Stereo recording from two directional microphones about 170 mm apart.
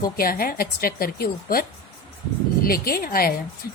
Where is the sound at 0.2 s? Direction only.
60° left (ahead or behind).